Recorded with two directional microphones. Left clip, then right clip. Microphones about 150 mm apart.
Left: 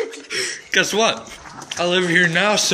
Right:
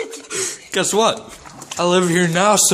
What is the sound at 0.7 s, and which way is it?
Speech, 35° right (ahead or behind).